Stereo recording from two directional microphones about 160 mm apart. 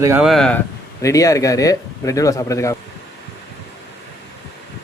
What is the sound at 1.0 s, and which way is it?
Speech, 20° left (ahead or behind).